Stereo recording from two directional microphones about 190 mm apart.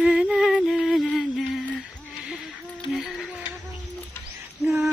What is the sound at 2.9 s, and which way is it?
Music, centre (ahead or behind).